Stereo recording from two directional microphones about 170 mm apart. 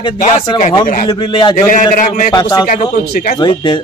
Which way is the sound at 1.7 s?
50° left (ahead or behind).